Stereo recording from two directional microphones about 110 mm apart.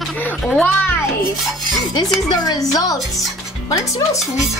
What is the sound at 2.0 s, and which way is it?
Speech, 35° left (ahead or behind).